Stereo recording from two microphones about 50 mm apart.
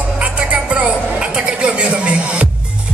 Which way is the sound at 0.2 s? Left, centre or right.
Right.